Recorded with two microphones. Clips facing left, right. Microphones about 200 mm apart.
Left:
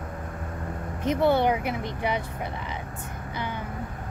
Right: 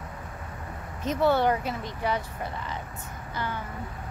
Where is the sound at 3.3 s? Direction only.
15° left (ahead or behind).